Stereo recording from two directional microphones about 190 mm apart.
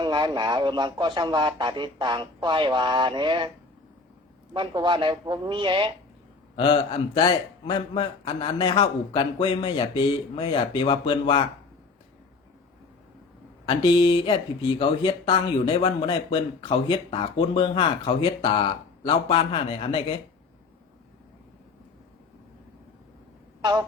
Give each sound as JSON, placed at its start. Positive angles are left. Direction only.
{"t": 0.0, "sound": "speech", "side_deg": -25}
{"t": 4.5, "sound": "speech", "side_deg": -25}
{"t": 6.6, "sound": "speech", "side_deg": 25}
{"t": 13.7, "sound": "speech", "side_deg": 25}
{"t": 23.6, "sound": "speech", "side_deg": -20}